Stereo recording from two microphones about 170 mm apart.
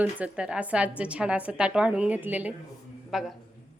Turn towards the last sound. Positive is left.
turn(degrees=0)  # may be behind; listen again after turning